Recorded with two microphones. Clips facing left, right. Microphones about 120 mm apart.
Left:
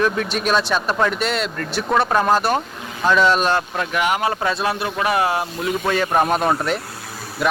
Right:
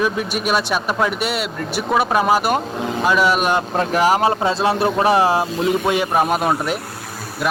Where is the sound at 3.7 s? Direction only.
35° right (ahead or behind).